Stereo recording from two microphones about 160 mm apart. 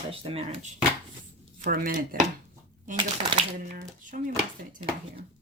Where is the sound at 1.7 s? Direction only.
60° right (ahead or behind).